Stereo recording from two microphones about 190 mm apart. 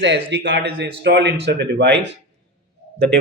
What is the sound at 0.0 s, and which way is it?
Speech, 65° right (ahead or behind).